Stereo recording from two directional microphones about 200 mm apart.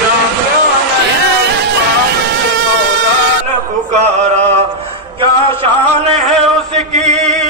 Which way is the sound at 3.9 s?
35° right (ahead or behind).